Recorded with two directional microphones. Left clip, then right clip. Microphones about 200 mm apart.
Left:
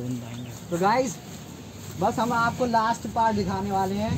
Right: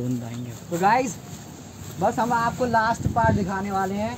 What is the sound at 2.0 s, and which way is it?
Speech, 10° right (ahead or behind).